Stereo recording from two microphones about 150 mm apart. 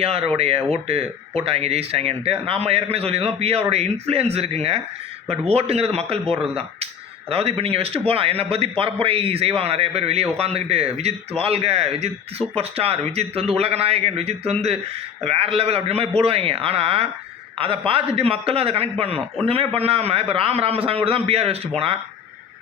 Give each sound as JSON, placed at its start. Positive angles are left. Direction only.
{"t": 0.0, "sound": "a man's voice", "side_deg": -40}